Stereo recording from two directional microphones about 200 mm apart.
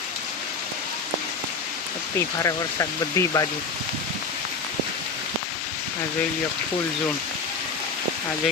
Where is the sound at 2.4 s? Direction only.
15° left (ahead or behind).